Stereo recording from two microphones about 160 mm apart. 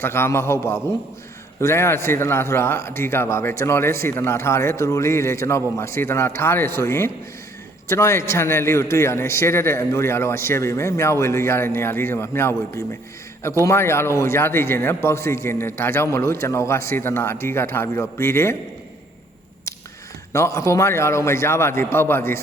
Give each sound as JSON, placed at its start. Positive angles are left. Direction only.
{"t": 0.0, "sound": "speech", "side_deg": 15}
{"t": 20.3, "sound": "speech", "side_deg": 20}